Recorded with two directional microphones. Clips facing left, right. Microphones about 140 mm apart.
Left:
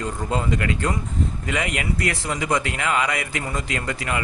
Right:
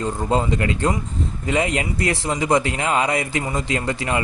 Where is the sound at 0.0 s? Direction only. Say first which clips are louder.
Right 4 dB; 30° right (ahead or behind).